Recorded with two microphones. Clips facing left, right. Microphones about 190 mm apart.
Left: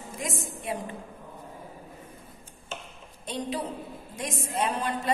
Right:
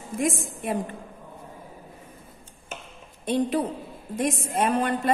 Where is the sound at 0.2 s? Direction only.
55° right (ahead or behind).